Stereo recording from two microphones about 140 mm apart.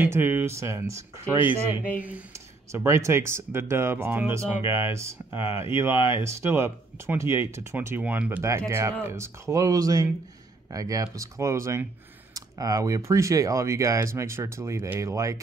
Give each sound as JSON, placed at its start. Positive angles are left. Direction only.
{"t": 0.0, "sound": "speech", "side_deg": -15}